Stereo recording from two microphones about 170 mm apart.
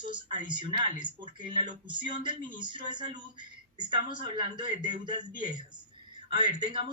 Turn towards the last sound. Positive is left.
turn(degrees=-25)  # may be behind; listen again after turning